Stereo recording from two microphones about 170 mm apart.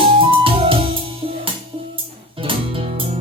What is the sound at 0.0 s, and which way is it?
Music, 30° right (ahead or behind).